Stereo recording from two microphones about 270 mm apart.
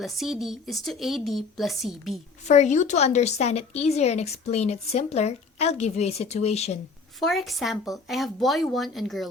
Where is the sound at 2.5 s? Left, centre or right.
Left.